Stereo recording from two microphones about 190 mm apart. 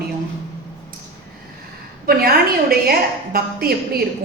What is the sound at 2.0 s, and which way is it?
A woman's voice, 50° right (ahead or behind).